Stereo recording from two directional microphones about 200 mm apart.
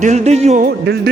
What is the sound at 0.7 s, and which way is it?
Speech, 55° right (ahead or behind).